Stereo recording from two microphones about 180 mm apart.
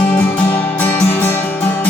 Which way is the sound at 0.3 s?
10° left (ahead or behind).